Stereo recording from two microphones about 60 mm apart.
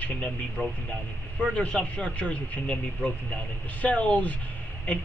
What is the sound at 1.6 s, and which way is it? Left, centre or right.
Speech, centre.